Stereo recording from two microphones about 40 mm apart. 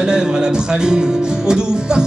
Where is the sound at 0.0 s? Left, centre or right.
Right.